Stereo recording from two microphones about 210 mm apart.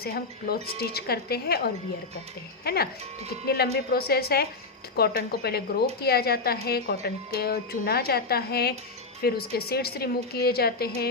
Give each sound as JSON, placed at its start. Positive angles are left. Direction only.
{"t": 0.0, "sound": "a woman's voice", "side_deg": 45}